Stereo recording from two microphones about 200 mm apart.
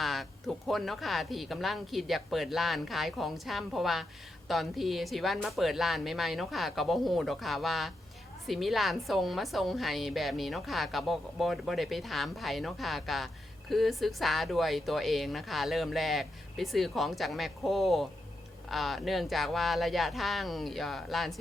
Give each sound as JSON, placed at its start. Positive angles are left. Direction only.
{"t": 0.0, "sound": "a woman's voice", "side_deg": 0}